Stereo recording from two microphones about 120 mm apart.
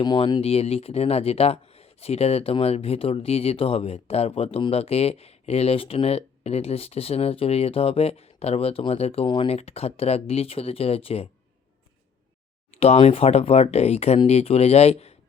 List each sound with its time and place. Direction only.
0.4 s speech: 60° left (ahead or behind)
9.2 s speech: 40° left (ahead or behind)
9.5 s speech: 60° left (ahead or behind)
12.7 s speech: 60° left (ahead or behind)